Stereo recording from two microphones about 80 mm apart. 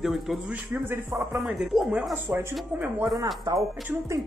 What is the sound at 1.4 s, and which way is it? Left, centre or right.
Speech, centre.